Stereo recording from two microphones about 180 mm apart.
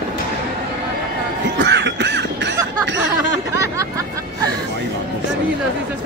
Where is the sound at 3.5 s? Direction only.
15° right (ahead or behind).